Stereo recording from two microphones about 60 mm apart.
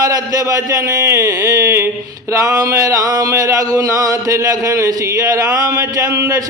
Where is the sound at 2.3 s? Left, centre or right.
Right.